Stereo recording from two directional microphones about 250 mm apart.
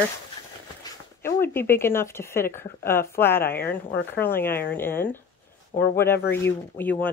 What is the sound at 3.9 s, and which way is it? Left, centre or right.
Speech, left.